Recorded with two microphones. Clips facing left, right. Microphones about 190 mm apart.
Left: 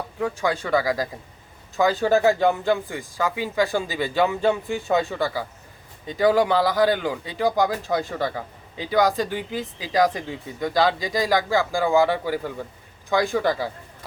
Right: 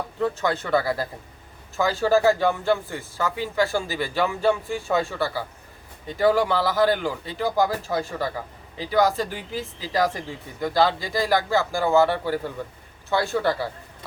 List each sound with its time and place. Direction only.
0.2 s speech: 10° left (ahead or behind)